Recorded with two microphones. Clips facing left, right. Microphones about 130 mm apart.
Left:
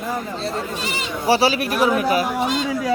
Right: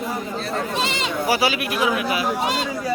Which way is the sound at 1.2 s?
30° left (ahead or behind).